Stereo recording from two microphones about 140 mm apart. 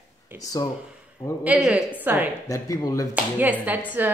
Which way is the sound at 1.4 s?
10° right (ahead or behind).